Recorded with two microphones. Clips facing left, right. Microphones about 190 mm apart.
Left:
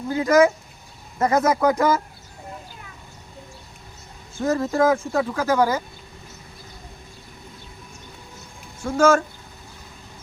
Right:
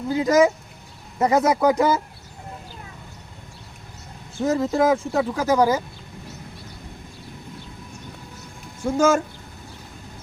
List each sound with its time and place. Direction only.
0.2 s speech: 20° right (ahead or behind)
4.4 s speech: 15° right (ahead or behind)
8.8 s speech: 15° right (ahead or behind)